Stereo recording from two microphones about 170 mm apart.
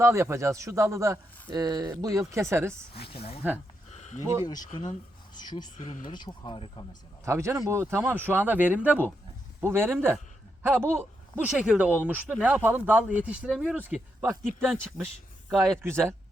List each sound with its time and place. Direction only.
0.0 s a man's voice: 15° right (ahead or behind)
3.1 s speech: 35° left (ahead or behind)
3.9 s a sound: 45° left (ahead or behind)
4.2 s a man's voice: 15° right (ahead or behind)
4.6 s speech: 45° left (ahead or behind)
5.3 s speech: 25° left (ahead or behind)
5.7 s speech: 50° left (ahead or behind)
6.1 s speech: 25° left (ahead or behind)
7.3 s a man's voice: 15° right (ahead or behind)
15.5 s speech: 5° left (ahead or behind)
15.8 s a man's voice: 15° right (ahead or behind)